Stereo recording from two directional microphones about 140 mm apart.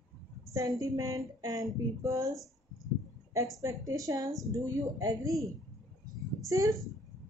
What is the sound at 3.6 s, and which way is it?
A woman's voice, 25° right (ahead or behind).